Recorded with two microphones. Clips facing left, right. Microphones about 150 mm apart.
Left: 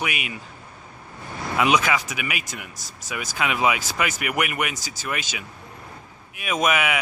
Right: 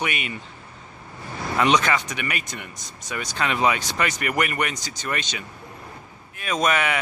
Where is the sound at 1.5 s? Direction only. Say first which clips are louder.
Even; 5° left (ahead or behind).